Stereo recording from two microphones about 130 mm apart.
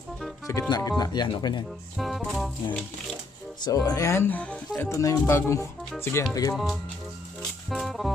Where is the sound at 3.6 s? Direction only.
30° left (ahead or behind); by 4.6 s 10° left (ahead or behind).